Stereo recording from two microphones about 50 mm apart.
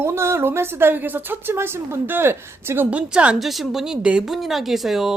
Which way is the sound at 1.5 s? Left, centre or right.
Right.